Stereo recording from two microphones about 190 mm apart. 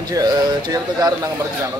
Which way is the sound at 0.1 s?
20° right (ahead or behind).